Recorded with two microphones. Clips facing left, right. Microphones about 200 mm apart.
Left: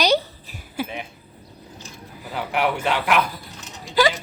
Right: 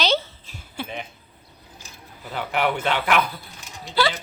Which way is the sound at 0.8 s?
5° left (ahead or behind).